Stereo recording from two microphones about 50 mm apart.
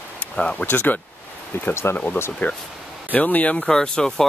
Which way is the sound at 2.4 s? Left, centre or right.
Left.